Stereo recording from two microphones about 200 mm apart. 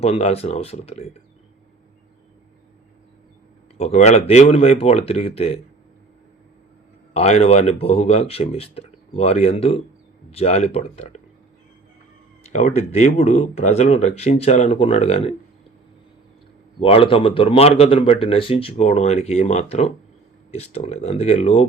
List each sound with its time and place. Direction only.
0.0 s speech: 30° left (ahead or behind)
3.8 s speech: 35° left (ahead or behind)
7.1 s speech: 30° left (ahead or behind)
12.5 s speech: 35° left (ahead or behind)
16.8 s speech: 30° left (ahead or behind)